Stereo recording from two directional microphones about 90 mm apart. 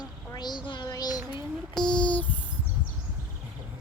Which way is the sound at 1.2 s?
25° right (ahead or behind).